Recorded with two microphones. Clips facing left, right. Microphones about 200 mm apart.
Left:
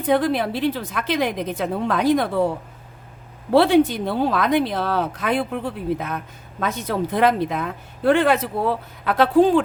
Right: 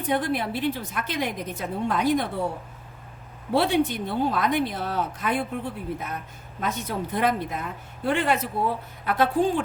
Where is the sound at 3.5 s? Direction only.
90° left.